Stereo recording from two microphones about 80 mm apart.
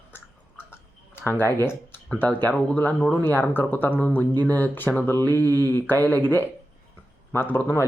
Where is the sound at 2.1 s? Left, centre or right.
Left.